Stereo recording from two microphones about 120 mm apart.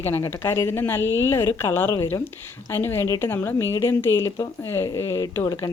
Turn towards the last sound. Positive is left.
turn(degrees=25)  # may be behind; listen again after turning